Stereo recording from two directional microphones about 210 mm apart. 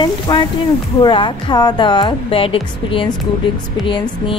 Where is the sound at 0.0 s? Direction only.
20° left (ahead or behind).